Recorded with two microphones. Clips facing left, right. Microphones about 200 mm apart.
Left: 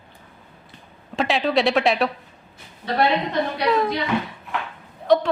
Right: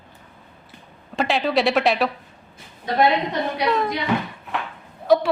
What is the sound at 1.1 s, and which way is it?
Speech, centre (ahead or behind).